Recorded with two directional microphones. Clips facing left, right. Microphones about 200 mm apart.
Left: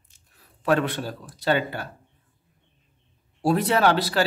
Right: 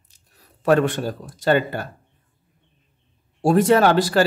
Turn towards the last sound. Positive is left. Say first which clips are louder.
# right 5 dB
turn(degrees=-45)  # may be behind; listen again after turning